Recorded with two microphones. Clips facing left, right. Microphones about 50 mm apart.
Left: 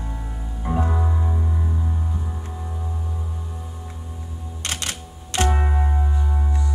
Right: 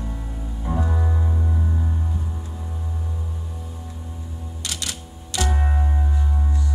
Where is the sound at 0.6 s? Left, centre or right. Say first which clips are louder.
Left 2 dB; left.